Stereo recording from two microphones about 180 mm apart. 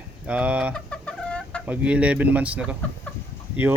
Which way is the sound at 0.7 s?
5° left (ahead or behind).